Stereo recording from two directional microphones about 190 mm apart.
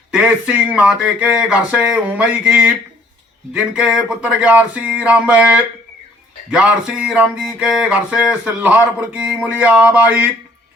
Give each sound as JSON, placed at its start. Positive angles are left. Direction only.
{"t": 0.1, "sound": "speech", "side_deg": -5}
{"t": 3.5, "sound": "music", "side_deg": -5}